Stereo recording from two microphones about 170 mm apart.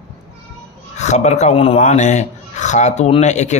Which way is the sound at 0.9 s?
40° left (ahead or behind).